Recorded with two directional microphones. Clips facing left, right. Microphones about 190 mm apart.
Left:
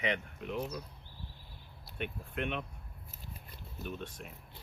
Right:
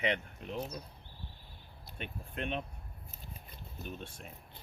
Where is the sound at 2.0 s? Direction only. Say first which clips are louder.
Left 3 dB; 30° right (ahead or behind).